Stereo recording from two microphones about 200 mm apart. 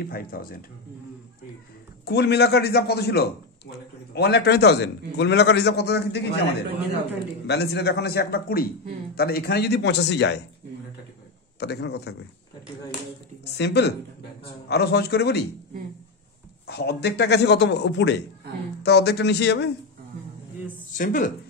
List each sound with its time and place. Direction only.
0.0 s a man's voice: 45° left (ahead or behind)
2.0 s a man's voice: 55° left (ahead or behind)
7.4 s a man's voice: 55° left (ahead or behind)
11.6 s a man's voice: 55° left (ahead or behind)
13.6 s a man's voice: 55° left (ahead or behind)
16.6 s a man's voice: 55° left (ahead or behind)
21.0 s a man's voice: 40° left (ahead or behind)